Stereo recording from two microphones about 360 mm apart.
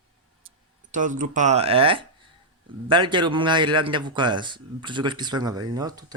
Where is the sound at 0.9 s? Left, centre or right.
Right.